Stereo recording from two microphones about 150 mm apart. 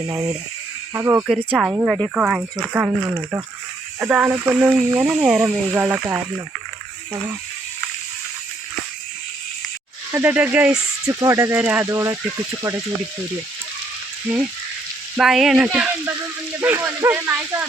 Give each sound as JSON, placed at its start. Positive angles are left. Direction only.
{"t": 0.1, "sound": "speech", "side_deg": -20}
{"t": 1.5, "sound": "speech", "side_deg": -10}
{"t": 10.1, "sound": "speech", "side_deg": -15}
{"t": 11.0, "sound": "speech", "side_deg": -20}
{"t": 15.1, "sound": "speech", "side_deg": 0}